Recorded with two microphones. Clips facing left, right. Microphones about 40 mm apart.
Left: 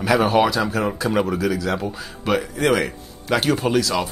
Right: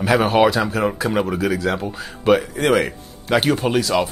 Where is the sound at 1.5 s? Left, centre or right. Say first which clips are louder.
Right 2 dB; right.